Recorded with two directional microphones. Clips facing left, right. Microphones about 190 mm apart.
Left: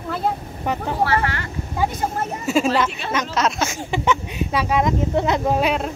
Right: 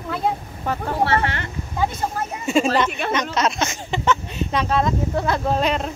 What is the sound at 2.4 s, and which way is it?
Speech, 5° left (ahead or behind).